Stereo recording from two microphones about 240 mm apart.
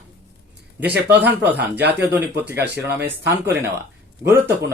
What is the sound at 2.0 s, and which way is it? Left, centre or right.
Speech, centre.